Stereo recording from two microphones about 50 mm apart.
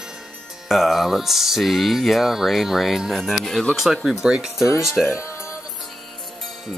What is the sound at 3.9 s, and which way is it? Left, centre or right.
Speech, centre.